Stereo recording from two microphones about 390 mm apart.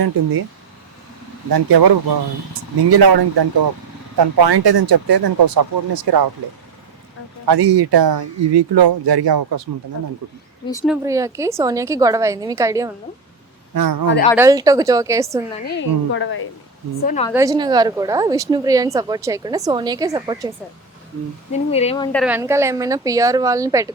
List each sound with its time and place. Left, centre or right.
1.5 s speech: right
2.5 s speech: right
4.2 s speech: right
7.4 s speech: right
10.7 s speech: centre
10.9 s a woman's voice: centre
13.7 s speech: right
14.3 s a woman's voice: centre
15.6 s a woman's voice: left
17.1 s speech: centre
17.3 s a woman's voice: centre
21.5 s speech: centre
22.2 s a woman's voice: centre